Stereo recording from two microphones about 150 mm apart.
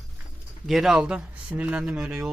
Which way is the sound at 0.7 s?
Centre (ahead or behind).